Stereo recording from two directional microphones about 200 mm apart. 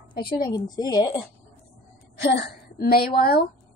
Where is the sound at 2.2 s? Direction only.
60° left (ahead or behind).